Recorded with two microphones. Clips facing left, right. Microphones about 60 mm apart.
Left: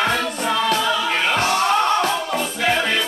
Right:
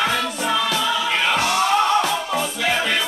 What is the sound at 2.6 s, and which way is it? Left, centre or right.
Music, left.